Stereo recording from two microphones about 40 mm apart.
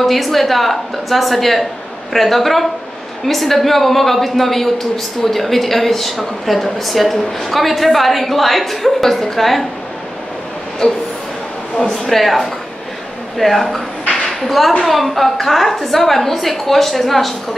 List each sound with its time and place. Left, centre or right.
0.0 s a woman's voice: centre
10.8 s a sound: left
11.7 s speech: centre
12.0 s a woman's voice: centre
14.2 s a sound: centre
14.9 s a woman's voice: centre